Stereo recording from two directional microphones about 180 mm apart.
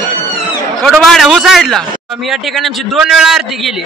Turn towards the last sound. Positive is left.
turn(degrees=0)  # may be behind; listen again after turning